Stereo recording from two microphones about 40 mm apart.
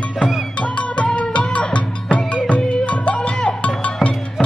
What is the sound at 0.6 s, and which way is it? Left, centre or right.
Music, left.